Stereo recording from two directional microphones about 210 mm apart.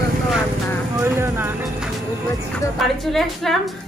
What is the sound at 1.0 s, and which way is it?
Speech, 10° right (ahead or behind).